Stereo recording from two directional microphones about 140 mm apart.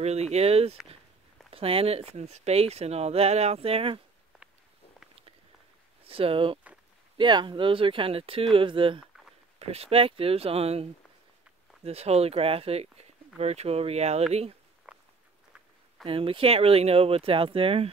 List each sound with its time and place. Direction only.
0.0 s speech: 50° right (ahead or behind)
6.0 s speech: 40° right (ahead or behind)
14.9 s a sound: 10° right (ahead or behind)
16.1 s speech: 40° right (ahead or behind)